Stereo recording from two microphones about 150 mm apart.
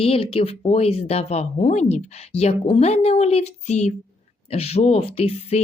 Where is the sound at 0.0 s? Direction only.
40° left (ahead or behind).